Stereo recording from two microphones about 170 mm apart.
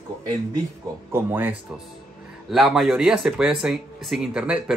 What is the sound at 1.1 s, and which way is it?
Speech, 15° right (ahead or behind).